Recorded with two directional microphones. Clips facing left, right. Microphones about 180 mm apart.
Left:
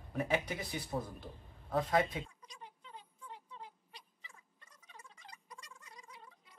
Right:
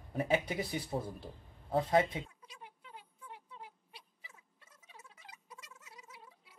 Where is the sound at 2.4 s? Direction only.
5° right (ahead or behind).